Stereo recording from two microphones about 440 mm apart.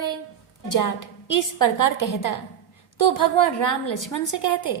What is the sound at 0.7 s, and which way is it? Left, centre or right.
A woman's voice, left.